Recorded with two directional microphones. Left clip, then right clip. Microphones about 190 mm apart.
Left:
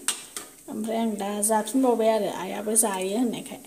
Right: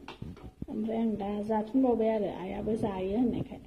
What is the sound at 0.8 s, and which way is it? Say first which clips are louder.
A woman's voice: left 6 dB; 50° left (ahead or behind).